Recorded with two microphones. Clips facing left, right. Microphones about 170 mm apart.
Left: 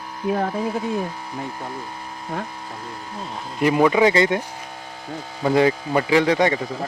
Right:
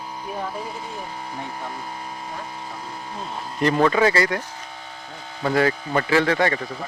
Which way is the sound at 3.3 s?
5° left (ahead or behind).